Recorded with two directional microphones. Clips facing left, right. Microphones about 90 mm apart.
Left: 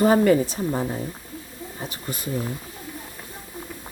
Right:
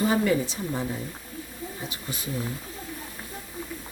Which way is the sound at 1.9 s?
50° left (ahead or behind).